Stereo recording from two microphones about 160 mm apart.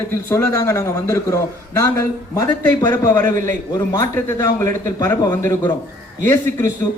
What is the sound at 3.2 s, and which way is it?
Speech, 55° right (ahead or behind).